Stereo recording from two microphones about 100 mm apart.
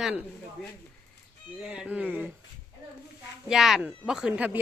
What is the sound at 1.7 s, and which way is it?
Speech, 15° right (ahead or behind).